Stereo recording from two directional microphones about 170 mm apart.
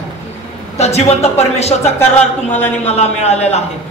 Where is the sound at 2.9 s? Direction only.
40° left (ahead or behind).